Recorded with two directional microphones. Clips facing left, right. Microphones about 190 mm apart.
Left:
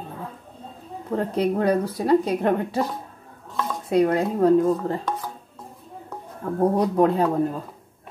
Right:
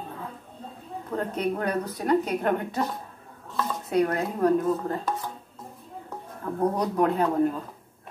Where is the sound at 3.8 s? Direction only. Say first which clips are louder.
Left 5 dB; 30° left (ahead or behind).